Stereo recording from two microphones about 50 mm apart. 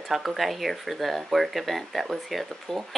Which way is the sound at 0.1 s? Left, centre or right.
Centre.